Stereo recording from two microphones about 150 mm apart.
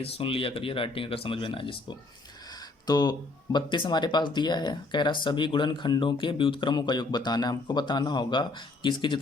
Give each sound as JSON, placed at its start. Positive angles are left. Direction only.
{"t": 0.0, "sound": "speech", "side_deg": 35}
{"t": 2.8, "sound": "speech", "side_deg": 25}